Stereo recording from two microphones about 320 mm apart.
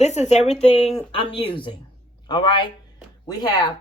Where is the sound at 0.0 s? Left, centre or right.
Left.